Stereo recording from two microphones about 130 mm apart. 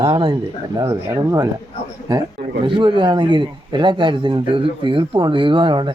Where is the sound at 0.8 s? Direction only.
20° right (ahead or behind).